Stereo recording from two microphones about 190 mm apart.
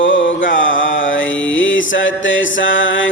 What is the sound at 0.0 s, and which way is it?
Mantra, 80° left.